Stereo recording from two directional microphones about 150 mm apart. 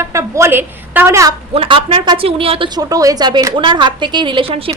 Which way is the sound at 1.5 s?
40° right (ahead or behind).